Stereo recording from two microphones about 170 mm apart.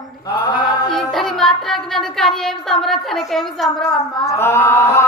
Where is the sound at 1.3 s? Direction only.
Centre (ahead or behind).